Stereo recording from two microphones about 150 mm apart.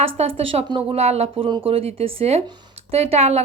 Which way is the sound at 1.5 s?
35° right (ahead or behind).